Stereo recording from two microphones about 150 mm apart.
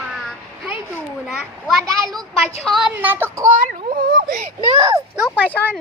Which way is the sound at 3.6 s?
60° right (ahead or behind).